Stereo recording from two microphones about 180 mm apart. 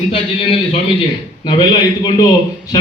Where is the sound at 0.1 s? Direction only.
30° left (ahead or behind).